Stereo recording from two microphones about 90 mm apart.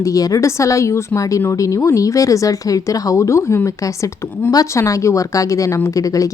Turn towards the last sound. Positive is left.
turn(degrees=40)  # may be behind; listen again after turning